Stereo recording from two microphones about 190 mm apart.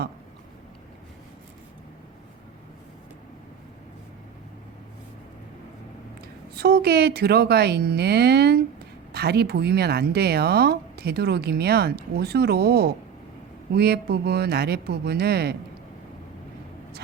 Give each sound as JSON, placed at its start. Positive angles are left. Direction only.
{"t": 6.6, "sound": "speech", "side_deg": -55}